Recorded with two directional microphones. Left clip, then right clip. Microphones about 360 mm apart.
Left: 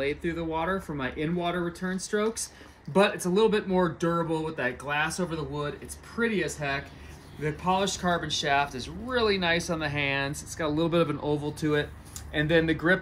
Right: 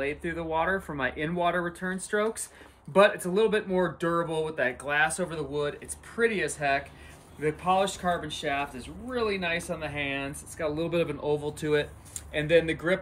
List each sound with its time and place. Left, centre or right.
0.0 s speech: centre